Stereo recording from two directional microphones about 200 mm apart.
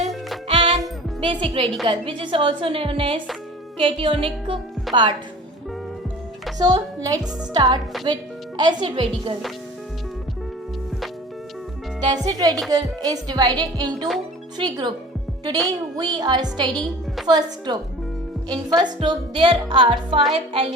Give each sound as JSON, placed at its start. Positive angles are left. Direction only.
{"t": 0.4, "sound": "music", "side_deg": -25}
{"t": 1.2, "sound": "a woman's voice", "side_deg": -25}
{"t": 4.9, "sound": "a woman's voice", "side_deg": 0}
{"t": 6.6, "sound": "a woman's voice", "side_deg": -20}
{"t": 12.0, "sound": "a woman's voice", "side_deg": -20}